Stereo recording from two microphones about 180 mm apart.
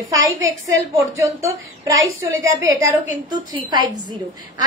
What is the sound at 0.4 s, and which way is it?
A woman's voice, 15° right (ahead or behind).